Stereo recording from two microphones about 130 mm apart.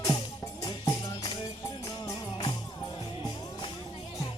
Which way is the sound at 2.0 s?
30° left (ahead or behind).